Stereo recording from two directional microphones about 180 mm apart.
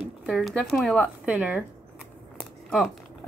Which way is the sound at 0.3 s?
Centre (ahead or behind).